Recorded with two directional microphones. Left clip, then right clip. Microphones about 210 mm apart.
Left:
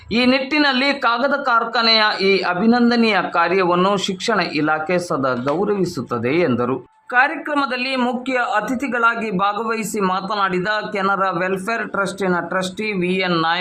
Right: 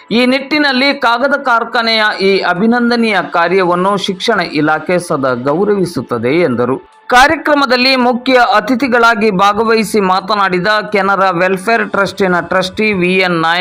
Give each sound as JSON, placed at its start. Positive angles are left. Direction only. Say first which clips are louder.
{"t": 0.1, "sound": "speech", "louder": "right 5 dB", "side_deg": -15}
{"t": 7.1, "sound": "a woman's voice", "louder": "right 9 dB", "side_deg": -30}